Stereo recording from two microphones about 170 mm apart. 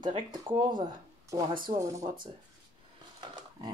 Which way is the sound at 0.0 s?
25° right (ahead or behind).